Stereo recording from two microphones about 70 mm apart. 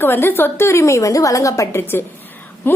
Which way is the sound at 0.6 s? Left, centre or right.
Left.